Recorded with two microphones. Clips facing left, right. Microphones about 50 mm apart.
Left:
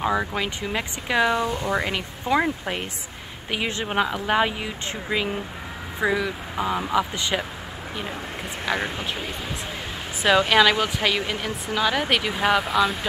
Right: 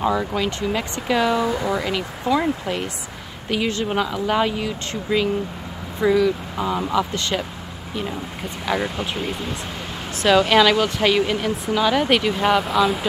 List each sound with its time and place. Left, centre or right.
0.0 s speech: centre
8.7 s speech: centre
10.2 s speech: centre